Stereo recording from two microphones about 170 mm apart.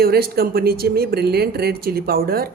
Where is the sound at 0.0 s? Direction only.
65° right (ahead or behind).